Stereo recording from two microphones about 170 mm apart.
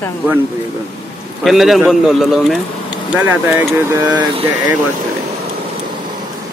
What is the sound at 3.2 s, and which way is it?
Speech, 15° right (ahead or behind).